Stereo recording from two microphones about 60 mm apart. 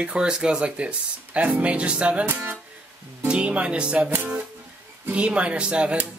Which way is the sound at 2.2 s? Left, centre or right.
Right.